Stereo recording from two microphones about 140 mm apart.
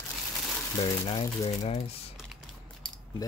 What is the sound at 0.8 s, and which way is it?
Speech, 45° left (ahead or behind).